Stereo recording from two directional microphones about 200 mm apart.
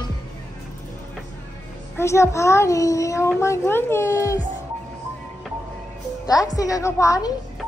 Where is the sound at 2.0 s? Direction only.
15° left (ahead or behind).